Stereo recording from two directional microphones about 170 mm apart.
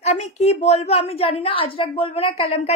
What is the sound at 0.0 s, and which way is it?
A woman's voice, 40° left (ahead or behind).